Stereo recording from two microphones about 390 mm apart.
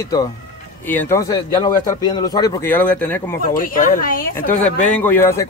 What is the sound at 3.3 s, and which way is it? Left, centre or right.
Speech, left.